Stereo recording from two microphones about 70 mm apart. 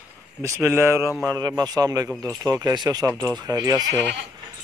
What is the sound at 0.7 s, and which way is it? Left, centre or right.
Speech, right.